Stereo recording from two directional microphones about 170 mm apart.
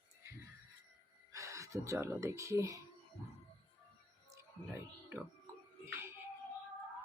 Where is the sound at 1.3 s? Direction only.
20° right (ahead or behind).